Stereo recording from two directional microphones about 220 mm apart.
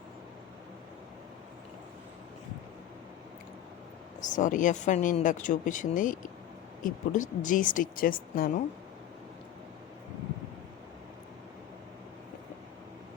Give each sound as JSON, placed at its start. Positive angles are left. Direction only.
{"t": 4.3, "sound": "speech", "side_deg": 35}